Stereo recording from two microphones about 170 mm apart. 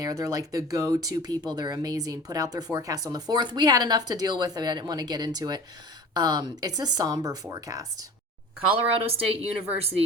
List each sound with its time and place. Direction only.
0.0 s speech: 20° right (ahead or behind)
9.1 s a woman's voice: 35° right (ahead or behind)